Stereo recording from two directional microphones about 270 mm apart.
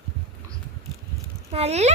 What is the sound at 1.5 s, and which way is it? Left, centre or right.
Speech, right.